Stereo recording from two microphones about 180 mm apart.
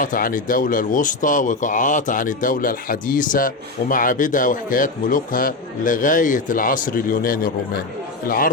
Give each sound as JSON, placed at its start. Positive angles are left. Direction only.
{"t": 0.0, "sound": "speech", "side_deg": 50}